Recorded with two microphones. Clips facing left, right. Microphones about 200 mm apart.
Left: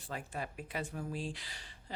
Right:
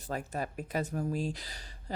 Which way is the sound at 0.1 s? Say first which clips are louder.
Right 6 dB; 40° right (ahead or behind).